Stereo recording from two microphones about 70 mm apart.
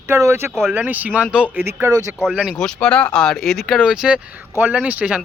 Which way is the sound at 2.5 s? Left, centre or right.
Centre.